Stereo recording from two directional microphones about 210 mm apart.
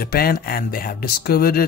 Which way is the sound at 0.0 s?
45° left (ahead or behind).